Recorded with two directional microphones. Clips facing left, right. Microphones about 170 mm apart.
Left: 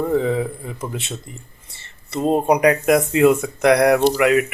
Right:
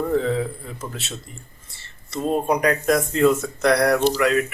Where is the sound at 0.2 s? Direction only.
10° left (ahead or behind).